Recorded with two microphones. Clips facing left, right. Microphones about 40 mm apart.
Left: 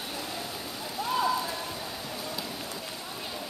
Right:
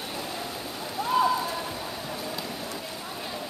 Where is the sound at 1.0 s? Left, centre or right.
Centre.